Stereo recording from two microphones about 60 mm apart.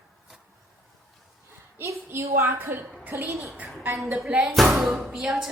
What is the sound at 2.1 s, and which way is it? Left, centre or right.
Speech, right.